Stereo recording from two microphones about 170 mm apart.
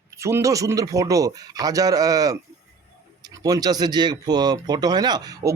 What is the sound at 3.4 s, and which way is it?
Speech, 20° right (ahead or behind).